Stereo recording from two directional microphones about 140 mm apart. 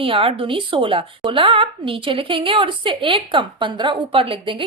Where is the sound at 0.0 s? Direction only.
40° right (ahead or behind).